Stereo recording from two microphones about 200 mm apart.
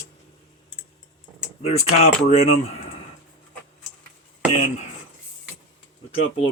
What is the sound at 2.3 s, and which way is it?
Speech, 30° left (ahead or behind).